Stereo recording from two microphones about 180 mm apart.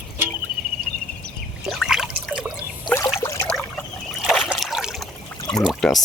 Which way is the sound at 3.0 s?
15° left (ahead or behind).